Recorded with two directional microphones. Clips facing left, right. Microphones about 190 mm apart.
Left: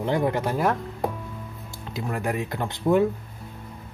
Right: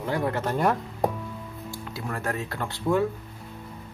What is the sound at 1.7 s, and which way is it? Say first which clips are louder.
Speech: left 3 dB; 20° left (ahead or behind).